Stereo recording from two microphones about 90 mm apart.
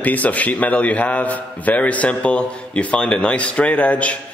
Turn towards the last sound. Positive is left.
turn(degrees=15)  # may be behind; listen again after turning